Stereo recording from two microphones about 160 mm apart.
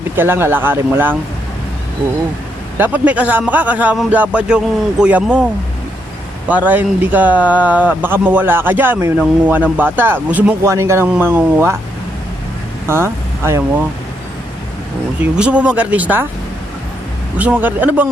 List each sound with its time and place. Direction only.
0.2 s a man's voice: 15° right (ahead or behind)
2.7 s a man's voice: 10° right (ahead or behind)
6.5 s a man's voice: 10° right (ahead or behind)
12.9 s a man's voice: 15° right (ahead or behind)
15.2 s a man's voice: 5° right (ahead or behind)
17.3 s a man's voice: 10° right (ahead or behind)